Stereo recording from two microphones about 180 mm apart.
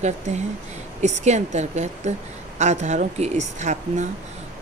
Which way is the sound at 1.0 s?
40° right (ahead or behind).